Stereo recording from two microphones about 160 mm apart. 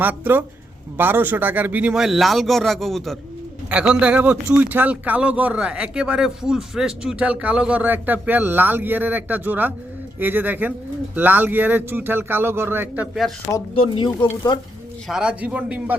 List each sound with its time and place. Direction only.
0.0 s a man's voice: 10° right (ahead or behind)
13.7 s speech: 35° left (ahead or behind)
15.0 s a man's voice: 5° right (ahead or behind)